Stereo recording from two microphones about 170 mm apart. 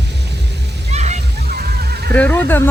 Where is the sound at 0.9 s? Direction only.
40° right (ahead or behind); by 2.1 s 60° right (ahead or behind).